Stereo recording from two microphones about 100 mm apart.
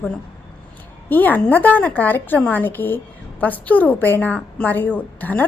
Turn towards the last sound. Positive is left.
turn(degrees=15)  # may be behind; listen again after turning